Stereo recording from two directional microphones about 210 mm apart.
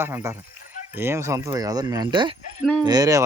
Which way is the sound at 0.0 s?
10° right (ahead or behind).